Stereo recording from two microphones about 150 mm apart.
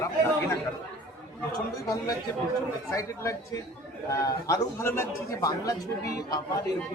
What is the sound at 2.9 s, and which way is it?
A man's voice, 20° left (ahead or behind).